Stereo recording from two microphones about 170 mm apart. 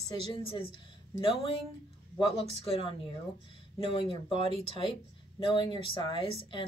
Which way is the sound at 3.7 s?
30° left (ahead or behind).